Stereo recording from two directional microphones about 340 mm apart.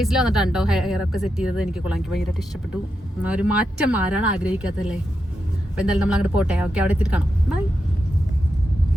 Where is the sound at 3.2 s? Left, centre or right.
Centre.